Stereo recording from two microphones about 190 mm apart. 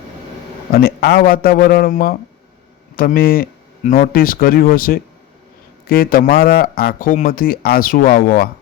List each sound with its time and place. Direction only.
0.7 s speech: 55° left (ahead or behind)